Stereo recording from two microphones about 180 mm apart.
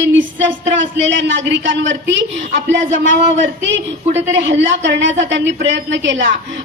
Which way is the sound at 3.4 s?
80° right.